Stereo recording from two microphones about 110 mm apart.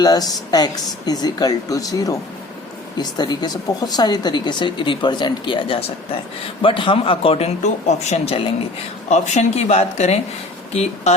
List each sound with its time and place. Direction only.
0.0 s speech: 35° left (ahead or behind); by 8.5 s 60° left (ahead or behind)
9.0 s speech: 90° left